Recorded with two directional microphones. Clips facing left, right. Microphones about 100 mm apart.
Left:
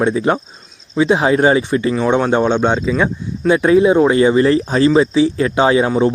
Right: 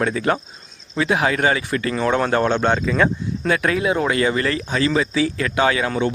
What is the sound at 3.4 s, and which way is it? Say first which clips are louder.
Speech: left 9 dB; 20° left (ahead or behind).